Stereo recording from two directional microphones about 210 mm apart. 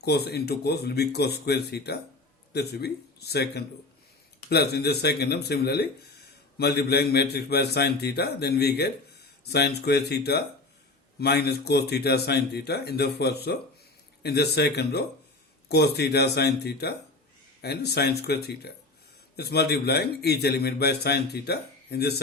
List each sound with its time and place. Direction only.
0.0 s a man's voice: 50° left (ahead or behind)